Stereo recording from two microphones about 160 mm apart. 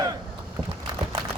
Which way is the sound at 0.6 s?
5° left (ahead or behind).